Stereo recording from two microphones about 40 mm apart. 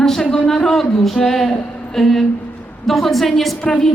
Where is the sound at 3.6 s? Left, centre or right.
Centre.